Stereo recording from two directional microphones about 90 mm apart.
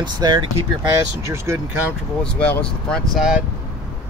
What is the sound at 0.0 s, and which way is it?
Speech, 50° right (ahead or behind).